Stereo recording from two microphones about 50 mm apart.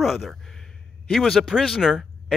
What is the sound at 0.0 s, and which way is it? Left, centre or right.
A man's voice, centre.